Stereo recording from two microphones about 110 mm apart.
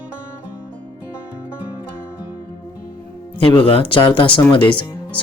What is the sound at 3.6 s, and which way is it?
Speech, 55° left (ahead or behind).